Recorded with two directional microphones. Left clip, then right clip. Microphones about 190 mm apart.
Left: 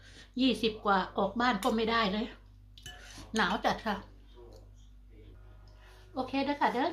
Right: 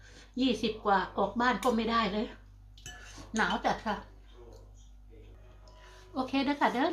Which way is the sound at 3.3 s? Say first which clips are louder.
Even; 40° left (ahead or behind).